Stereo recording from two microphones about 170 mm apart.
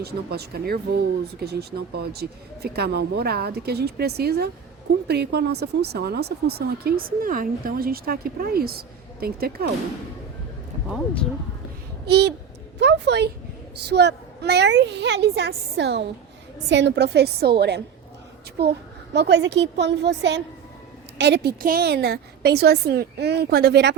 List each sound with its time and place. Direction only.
0.0 s speech: 70° right (ahead or behind)
10.8 s speech: centre (ahead or behind)
12.0 s a woman's voice: 80° right
12.8 s a woman's voice: 90° right
19.1 s a woman's voice: 85° right